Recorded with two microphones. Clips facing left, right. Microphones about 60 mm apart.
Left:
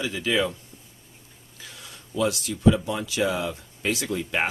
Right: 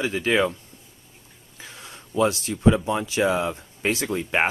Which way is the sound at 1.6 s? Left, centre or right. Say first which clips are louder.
Right 3 dB; right.